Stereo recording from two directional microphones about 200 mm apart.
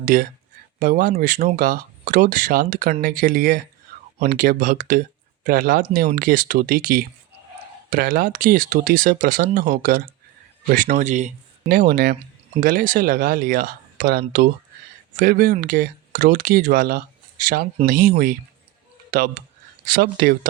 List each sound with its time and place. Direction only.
0.0 s speech: 45° right (ahead or behind)
19.1 s speech: 45° right (ahead or behind)